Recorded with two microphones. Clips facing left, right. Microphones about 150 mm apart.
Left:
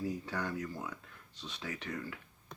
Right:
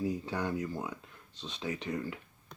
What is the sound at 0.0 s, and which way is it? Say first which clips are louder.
Speech: right 4 dB; 20° right (ahead or behind).